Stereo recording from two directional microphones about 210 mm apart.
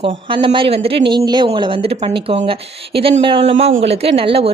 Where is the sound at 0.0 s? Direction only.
25° right (ahead or behind).